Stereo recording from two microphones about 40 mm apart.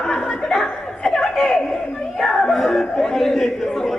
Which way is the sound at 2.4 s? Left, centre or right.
Centre.